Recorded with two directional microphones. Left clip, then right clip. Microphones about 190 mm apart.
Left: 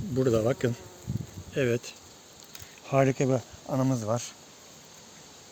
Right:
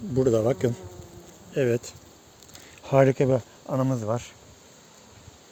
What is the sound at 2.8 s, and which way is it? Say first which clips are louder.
Speech: right 5 dB; 60° right (ahead or behind).